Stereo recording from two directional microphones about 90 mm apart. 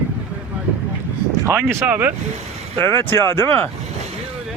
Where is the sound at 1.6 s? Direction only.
25° right (ahead or behind).